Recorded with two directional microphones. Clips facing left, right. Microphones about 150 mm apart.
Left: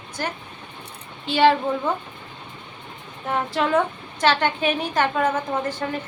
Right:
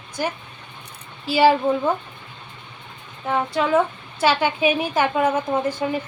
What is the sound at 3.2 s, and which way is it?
A woman's voice, centre (ahead or behind).